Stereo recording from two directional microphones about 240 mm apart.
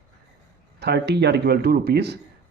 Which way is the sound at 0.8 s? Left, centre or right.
Right.